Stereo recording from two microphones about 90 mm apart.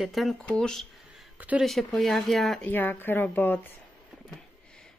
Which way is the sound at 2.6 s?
20° left (ahead or behind).